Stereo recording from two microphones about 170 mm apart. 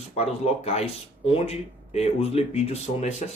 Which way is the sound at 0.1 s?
35° left (ahead or behind).